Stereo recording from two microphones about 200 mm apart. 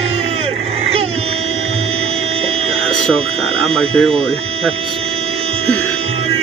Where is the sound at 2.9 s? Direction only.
5° left (ahead or behind).